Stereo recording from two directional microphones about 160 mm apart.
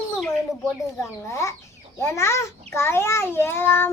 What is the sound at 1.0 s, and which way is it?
A child's voice, 20° left (ahead or behind).